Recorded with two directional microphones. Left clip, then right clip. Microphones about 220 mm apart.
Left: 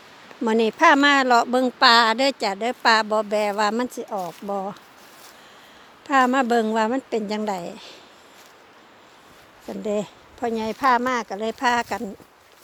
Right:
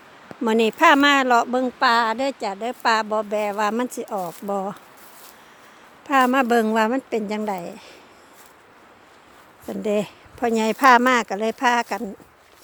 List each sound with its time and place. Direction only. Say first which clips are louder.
0.4 s speech: right 1 dB; 5° right (ahead or behind)
3.8 s speech: right 1 dB; 10° right (ahead or behind)
6.1 s a woman's voice: right 1 dB; centre (ahead or behind)
9.6 s speech: right 3 dB; 15° right (ahead or behind)
10.5 s speech: right 5 dB; 30° right (ahead or behind); by 12.1 s 5° right (ahead or behind)